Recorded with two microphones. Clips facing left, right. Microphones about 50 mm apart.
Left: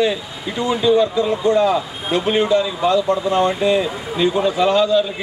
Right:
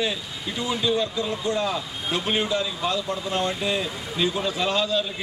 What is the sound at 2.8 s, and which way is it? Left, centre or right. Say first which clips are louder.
A man's voice: left 10 dB; centre.